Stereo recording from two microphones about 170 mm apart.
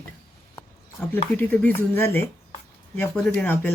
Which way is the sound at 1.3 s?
10° left (ahead or behind).